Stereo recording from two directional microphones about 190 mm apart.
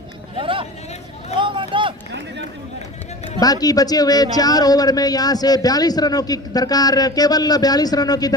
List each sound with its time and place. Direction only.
0.3 s speech: 25° right (ahead or behind)
1.4 s a sound: 25° right (ahead or behind)
3.4 s speech: 20° left (ahead or behind)